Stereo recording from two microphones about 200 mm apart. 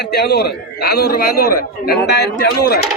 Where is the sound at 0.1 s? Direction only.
55° left (ahead or behind).